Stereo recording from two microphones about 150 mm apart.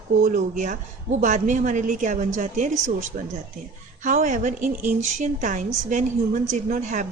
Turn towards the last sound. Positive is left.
turn(degrees=-55)  # may be behind; listen again after turning